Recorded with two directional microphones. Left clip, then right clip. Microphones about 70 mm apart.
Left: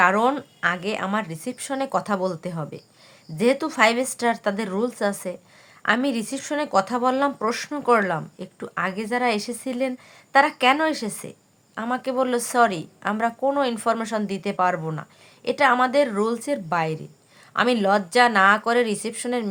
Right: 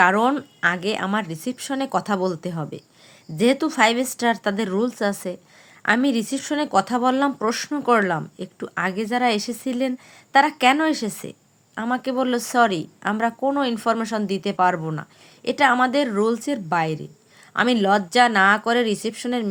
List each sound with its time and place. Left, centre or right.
0.0 s a woman's voice: right